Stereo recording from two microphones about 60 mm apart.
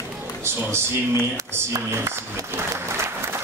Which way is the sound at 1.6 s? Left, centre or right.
Right.